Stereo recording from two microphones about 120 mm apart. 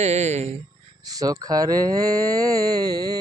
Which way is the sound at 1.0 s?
30° right (ahead or behind).